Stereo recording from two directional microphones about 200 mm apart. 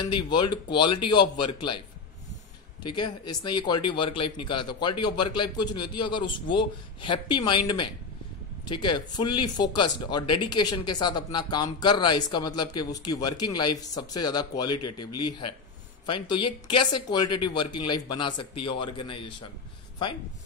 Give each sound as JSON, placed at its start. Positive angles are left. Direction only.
{"t": 0.0, "sound": "speech", "side_deg": 20}
{"t": 2.8, "sound": "speech", "side_deg": 20}